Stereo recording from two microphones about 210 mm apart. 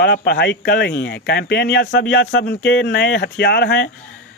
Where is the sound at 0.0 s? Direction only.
50° left (ahead or behind).